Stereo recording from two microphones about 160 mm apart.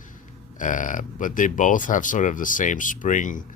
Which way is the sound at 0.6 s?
55° left (ahead or behind).